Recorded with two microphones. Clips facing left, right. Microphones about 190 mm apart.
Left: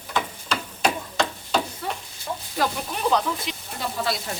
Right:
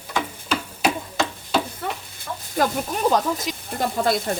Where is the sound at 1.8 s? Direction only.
55° right (ahead or behind).